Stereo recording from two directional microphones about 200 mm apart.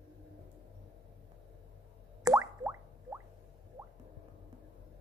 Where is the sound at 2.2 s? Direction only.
15° right (ahead or behind).